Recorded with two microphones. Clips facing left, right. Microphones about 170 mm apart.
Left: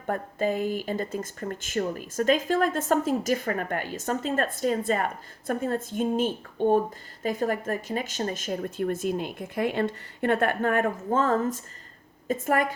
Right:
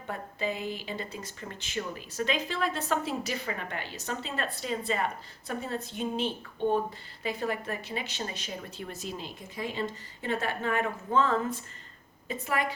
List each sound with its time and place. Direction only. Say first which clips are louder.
0.1 s speech: left 7 dB; 45° left (ahead or behind)